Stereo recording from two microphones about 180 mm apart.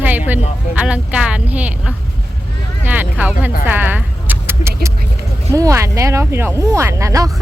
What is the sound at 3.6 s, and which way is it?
Speech, 10° right (ahead or behind).